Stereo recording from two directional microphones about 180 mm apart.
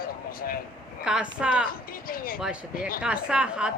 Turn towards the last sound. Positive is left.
turn(degrees=-5)  # may be behind; listen again after turning